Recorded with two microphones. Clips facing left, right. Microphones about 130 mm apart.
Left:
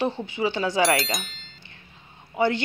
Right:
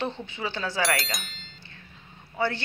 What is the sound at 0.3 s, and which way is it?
Speech, 15° left (ahead or behind).